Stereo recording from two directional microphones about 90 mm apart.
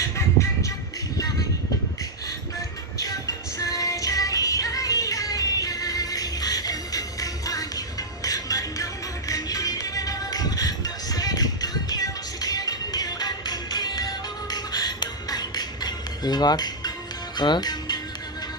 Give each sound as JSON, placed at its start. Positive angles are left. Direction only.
{"t": 3.0, "sound": "music", "side_deg": 40}